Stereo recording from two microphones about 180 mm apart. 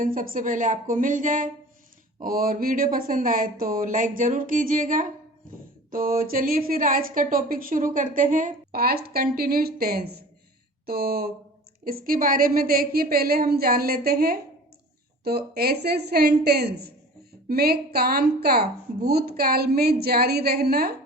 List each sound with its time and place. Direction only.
0.0 s a woman's voice: 50° right (ahead or behind)